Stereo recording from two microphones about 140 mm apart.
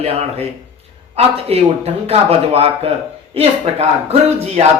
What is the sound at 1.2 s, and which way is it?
Speech, 45° right (ahead or behind).